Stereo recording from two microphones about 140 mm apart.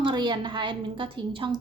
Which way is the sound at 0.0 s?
35° right (ahead or behind).